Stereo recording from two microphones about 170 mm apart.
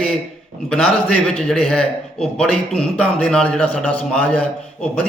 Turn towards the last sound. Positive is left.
turn(degrees=5)  # may be behind; listen again after turning